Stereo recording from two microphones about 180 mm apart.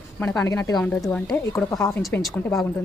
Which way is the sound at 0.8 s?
5° left (ahead or behind).